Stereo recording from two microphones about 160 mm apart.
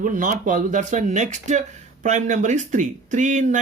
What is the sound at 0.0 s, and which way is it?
Speech, 55° right (ahead or behind).